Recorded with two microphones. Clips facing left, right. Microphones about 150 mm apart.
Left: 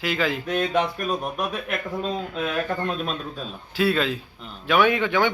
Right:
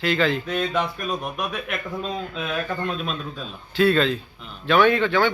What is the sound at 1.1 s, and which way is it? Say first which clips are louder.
Speech: left 1 dB; 30° left (ahead or behind).